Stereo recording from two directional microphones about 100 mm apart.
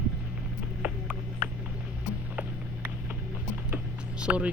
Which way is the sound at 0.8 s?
15° right (ahead or behind).